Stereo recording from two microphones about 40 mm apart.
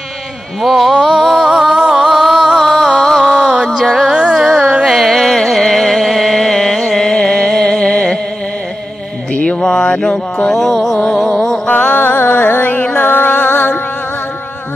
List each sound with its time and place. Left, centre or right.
0.6 s a sound: centre
1.7 s music: right
2.0 s music: centre
2.6 s music: centre
3.5 s music: centre
3.8 s music: centre
4.1 s carnatic music: centre
4.8 s carnatic music: centre
5.6 s music: centre; by 8.2 s left
9.3 s a sound: left
10.5 s music: centre
11.7 s music: left
12.0 s music: left